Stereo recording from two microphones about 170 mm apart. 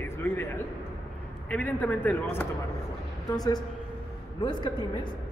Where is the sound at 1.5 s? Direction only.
10° left (ahead or behind).